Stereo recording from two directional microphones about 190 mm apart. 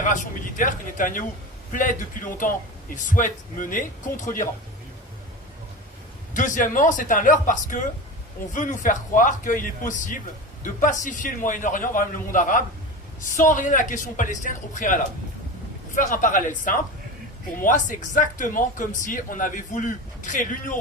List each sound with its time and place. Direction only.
0.0 s speech: 40° left (ahead or behind)
6.3 s speech: 45° left (ahead or behind)
16.0 s speech: 45° left (ahead or behind)